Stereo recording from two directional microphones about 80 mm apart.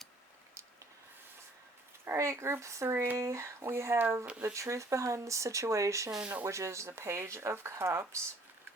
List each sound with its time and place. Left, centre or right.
2.0 s speech: right
2.9 s speech: right
3.2 s speech: right
4.3 s speech: centre
4.5 s speech: right